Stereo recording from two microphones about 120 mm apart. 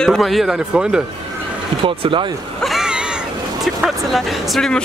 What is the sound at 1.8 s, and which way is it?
Speech, 45° right (ahead or behind).